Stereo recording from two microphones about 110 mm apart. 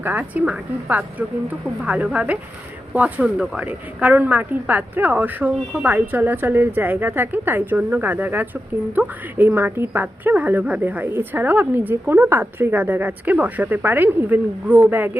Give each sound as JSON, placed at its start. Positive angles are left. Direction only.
{"t": 0.0, "sound": "a woman's voice", "side_deg": -15}